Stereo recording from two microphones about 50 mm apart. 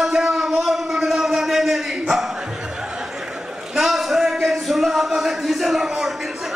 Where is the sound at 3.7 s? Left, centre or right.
Centre.